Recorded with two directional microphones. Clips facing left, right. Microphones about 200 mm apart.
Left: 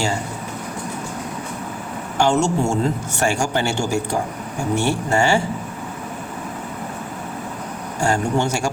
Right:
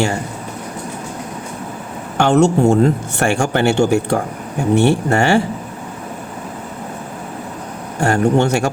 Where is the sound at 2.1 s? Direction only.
60° right (ahead or behind).